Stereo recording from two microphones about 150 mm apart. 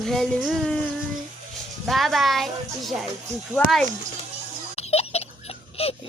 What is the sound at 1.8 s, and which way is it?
A child's voice, centre (ahead or behind).